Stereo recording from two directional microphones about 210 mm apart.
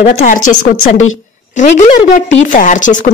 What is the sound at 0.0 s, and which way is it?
Speech, 45° left (ahead or behind).